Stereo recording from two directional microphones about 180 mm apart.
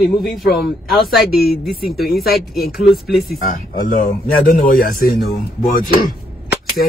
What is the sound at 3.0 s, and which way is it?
Speech, centre (ahead or behind).